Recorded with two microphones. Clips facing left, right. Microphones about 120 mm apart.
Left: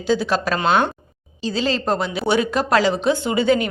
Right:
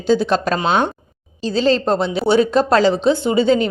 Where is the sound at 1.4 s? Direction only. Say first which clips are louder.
Right 6 dB; 35° right (ahead or behind).